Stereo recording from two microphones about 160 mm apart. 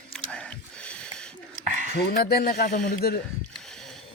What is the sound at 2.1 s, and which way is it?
Speech, 70° left (ahead or behind).